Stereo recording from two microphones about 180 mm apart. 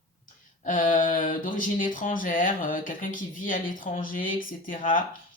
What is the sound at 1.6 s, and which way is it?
Speech, 50° left (ahead or behind).